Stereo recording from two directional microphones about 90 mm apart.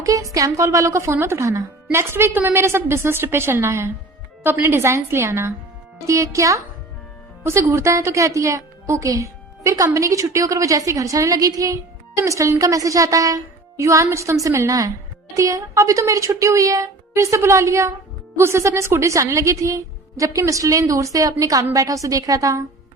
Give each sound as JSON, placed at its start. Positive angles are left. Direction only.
{"t": 0.0, "sound": "a woman's voice", "side_deg": -35}